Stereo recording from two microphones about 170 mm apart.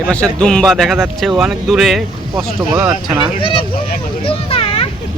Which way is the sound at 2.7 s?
15° right (ahead or behind).